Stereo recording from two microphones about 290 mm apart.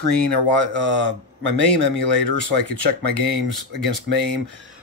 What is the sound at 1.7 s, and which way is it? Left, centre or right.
Speech, right.